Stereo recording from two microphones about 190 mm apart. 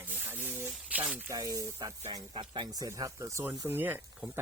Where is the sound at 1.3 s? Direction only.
20° right (ahead or behind).